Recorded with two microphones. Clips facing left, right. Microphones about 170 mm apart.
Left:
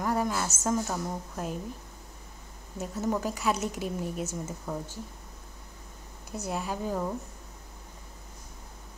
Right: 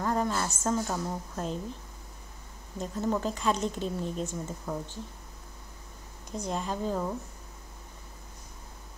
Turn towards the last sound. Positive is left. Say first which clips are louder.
# even
turn(degrees=5)  # may be behind; listen again after turning